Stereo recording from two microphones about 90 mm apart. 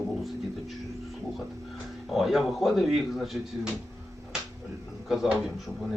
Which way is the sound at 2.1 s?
Centre (ahead or behind).